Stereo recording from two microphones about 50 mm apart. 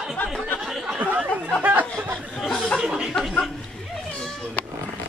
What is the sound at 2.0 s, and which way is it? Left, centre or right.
Chatter, centre.